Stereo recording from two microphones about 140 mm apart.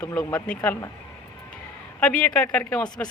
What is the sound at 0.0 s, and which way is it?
Speech, 20° left (ahead or behind).